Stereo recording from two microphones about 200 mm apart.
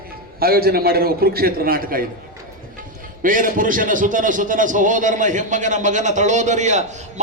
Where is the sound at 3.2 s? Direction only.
40° right (ahead or behind).